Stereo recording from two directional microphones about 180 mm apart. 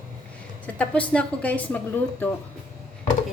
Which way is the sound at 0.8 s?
5° left (ahead or behind).